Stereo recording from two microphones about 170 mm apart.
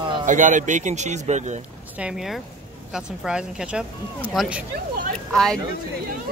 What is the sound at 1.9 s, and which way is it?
Speech, 5° right (ahead or behind).